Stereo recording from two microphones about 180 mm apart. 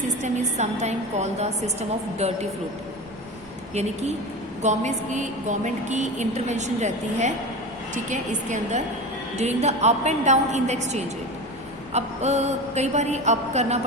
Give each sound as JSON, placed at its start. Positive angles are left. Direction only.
{"t": 0.2, "sound": "a woman's voice", "side_deg": -40}
{"t": 4.6, "sound": "a woman's voice", "side_deg": -40}